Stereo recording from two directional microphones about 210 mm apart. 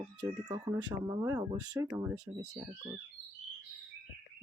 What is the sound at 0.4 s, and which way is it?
Speech, 20° right (ahead or behind).